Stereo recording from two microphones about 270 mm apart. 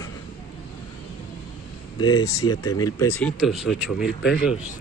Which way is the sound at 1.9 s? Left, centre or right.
Centre.